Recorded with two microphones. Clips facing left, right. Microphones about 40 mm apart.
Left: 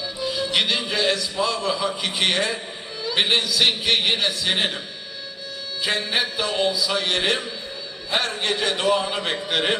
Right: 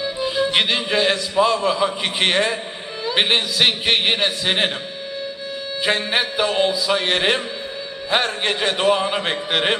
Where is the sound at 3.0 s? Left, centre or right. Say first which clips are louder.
Right 2 dB; right.